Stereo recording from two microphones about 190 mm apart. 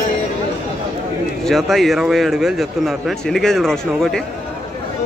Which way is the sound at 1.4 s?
Centre (ahead or behind).